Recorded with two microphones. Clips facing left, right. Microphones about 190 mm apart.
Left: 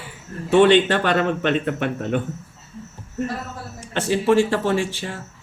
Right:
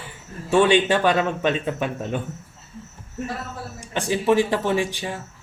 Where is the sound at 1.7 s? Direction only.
65° left (ahead or behind).